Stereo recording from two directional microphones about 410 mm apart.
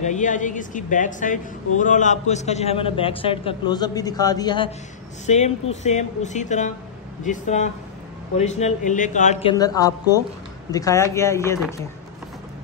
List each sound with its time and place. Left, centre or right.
0.0 s a woman's voice: centre